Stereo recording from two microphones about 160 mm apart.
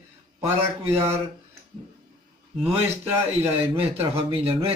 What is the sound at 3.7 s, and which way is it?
Speech, 35° right (ahead or behind).